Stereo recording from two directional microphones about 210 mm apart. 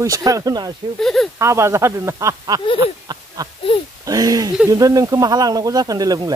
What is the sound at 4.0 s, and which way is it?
Speech, 15° right (ahead or behind).